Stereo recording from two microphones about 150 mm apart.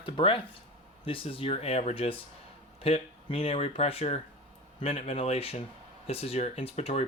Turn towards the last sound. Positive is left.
turn(degrees=45)  # may be behind; listen again after turning